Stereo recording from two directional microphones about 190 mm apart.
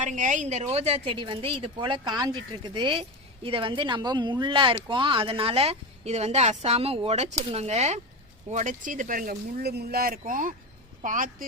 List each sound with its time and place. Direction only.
0.0 s a woman's voice: 40° right (ahead or behind)